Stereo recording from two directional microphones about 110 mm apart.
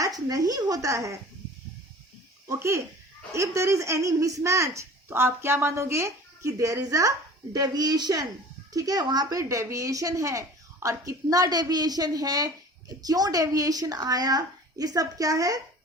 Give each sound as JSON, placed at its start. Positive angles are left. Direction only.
{"t": 0.0, "sound": "a woman's voice", "side_deg": -30}
{"t": 2.5, "sound": "a woman's voice", "side_deg": -25}